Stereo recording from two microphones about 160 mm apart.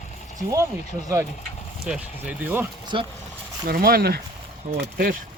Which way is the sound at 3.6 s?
70° right (ahead or behind).